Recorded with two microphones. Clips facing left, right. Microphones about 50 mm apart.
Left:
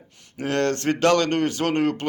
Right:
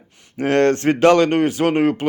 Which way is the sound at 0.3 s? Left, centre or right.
Right.